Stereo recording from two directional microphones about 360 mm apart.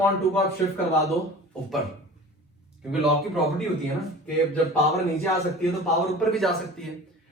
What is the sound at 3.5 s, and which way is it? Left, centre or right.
A man's voice, centre.